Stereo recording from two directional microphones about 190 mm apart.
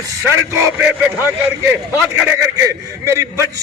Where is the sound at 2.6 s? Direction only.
15° right (ahead or behind).